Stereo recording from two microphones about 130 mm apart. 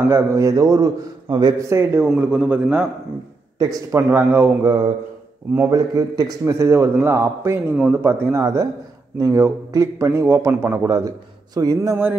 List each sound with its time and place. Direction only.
0.1 s a man's voice: 25° right (ahead or behind)
2.1 s a man's voice: 10° right (ahead or behind)
3.5 s speech: 25° right (ahead or behind)
4.1 s a man's voice: 15° right (ahead or behind)